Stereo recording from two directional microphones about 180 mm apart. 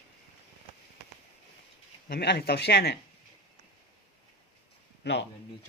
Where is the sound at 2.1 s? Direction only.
65° left (ahead or behind).